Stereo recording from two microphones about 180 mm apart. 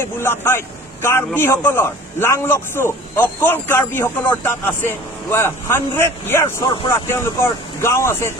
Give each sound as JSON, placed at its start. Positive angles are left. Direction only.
{"t": 0.0, "sound": "a man's voice", "side_deg": 15}